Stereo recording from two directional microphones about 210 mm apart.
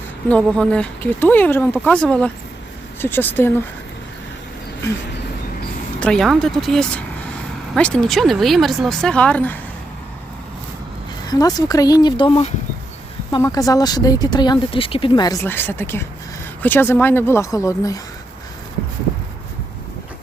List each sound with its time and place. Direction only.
0.3 s speech: 5° left (ahead or behind)
6.0 s speech: 5° left (ahead or behind)
11.3 s speech: 15° left (ahead or behind)